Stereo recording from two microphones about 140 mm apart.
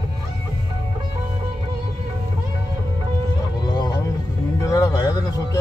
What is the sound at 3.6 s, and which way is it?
Music, 30° left (ahead or behind).